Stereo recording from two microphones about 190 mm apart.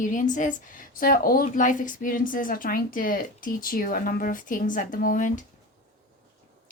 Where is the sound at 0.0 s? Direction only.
45° left (ahead or behind).